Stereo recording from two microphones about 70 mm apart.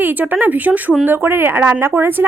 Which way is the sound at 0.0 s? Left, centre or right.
Right.